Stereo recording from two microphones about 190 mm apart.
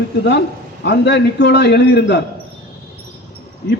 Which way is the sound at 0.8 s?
65° left (ahead or behind).